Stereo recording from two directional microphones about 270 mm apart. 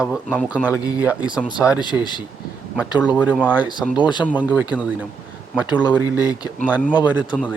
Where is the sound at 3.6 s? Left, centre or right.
Centre.